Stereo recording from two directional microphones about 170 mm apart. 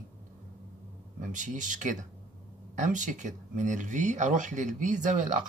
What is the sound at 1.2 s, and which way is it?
Speech, 50° right (ahead or behind).